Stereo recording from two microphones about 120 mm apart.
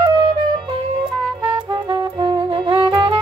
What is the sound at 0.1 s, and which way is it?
Music, 35° right (ahead or behind).